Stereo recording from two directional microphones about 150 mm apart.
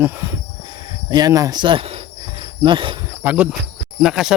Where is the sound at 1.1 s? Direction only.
25° right (ahead or behind).